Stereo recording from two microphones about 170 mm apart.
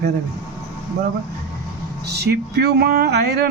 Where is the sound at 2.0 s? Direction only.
75° right (ahead or behind).